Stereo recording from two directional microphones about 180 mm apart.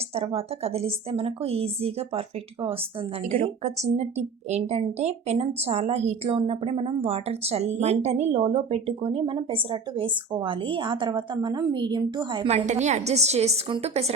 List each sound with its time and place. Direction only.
0.1 s a woman's voice: 30° right (ahead or behind)
12.5 s a woman's voice: 35° right (ahead or behind)